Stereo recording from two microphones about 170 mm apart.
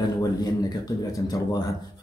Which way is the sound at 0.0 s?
20° left (ahead or behind).